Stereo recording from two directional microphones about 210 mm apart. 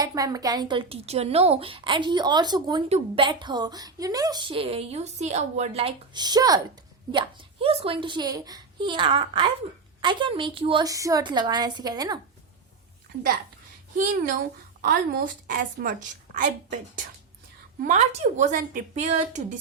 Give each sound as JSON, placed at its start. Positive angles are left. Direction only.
{"t": 0.0, "sound": "a woman's voice", "side_deg": -15}
{"t": 14.8, "sound": "a woman's voice", "side_deg": -45}